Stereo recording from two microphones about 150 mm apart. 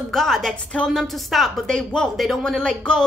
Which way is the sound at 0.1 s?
5° left (ahead or behind).